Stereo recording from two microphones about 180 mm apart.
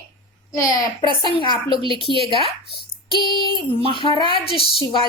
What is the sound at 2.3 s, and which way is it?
A woman's voice, 30° left (ahead or behind).